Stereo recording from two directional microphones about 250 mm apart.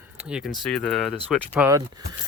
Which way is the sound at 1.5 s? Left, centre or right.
Centre.